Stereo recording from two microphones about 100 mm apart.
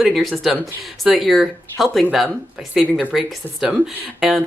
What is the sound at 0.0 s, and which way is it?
Speech, centre (ahead or behind).